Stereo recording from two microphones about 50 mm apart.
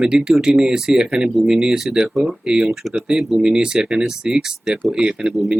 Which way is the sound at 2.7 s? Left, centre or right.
Centre.